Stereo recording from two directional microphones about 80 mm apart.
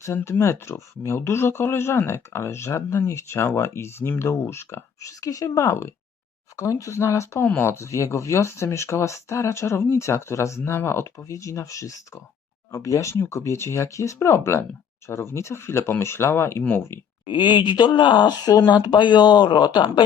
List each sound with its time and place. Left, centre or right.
0.0 s speech: left
7.4 s speech: left
7.7 s speech: left
17.2 s speech: left